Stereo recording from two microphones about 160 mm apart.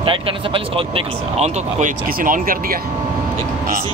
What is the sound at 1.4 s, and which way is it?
Speech, 55° right (ahead or behind).